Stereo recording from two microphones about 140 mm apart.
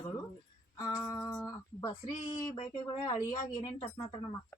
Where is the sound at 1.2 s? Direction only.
5° left (ahead or behind).